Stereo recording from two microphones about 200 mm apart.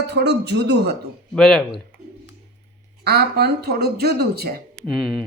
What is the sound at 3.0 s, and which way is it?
Speech, 50° right (ahead or behind).